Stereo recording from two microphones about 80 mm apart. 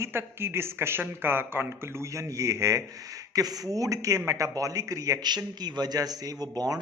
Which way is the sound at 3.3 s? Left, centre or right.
Right.